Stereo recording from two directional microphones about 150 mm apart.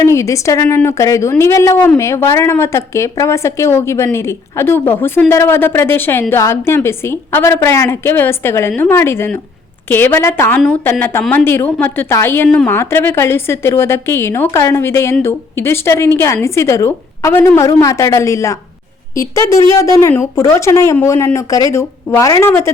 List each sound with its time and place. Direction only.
0.0 s a woman's voice: 20° left (ahead or behind)